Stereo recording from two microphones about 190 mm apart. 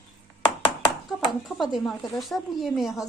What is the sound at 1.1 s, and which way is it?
Speech, centre (ahead or behind).